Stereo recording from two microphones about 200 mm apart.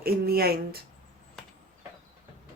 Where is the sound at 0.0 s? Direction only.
50° right (ahead or behind).